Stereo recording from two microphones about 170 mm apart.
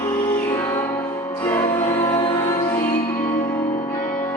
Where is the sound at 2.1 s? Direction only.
25° left (ahead or behind).